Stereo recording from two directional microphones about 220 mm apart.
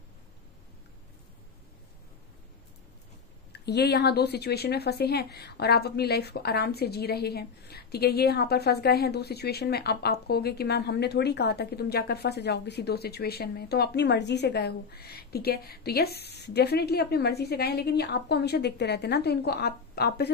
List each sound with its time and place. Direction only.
3.5 s speech: 50° left (ahead or behind)